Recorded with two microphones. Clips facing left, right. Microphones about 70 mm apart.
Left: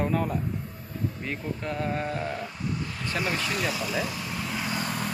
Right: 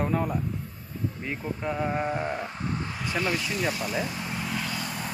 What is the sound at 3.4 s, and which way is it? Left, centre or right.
Speech, left.